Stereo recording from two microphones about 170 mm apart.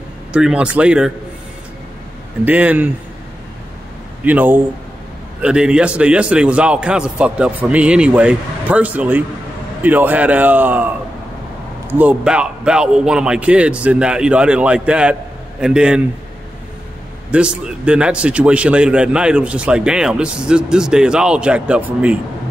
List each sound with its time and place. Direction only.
0.3 s a man's voice: 5° right (ahead or behind)
2.4 s a man's voice: 10° right (ahead or behind)
4.2 s a man's voice: 10° right (ahead or behind)
11.9 s a man's voice: 10° right (ahead or behind)
17.3 s a man's voice: 5° right (ahead or behind)